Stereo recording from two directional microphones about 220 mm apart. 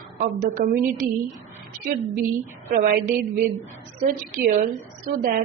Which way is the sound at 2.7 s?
40° right (ahead or behind).